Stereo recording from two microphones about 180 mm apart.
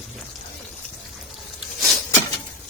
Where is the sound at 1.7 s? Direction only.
Centre (ahead or behind).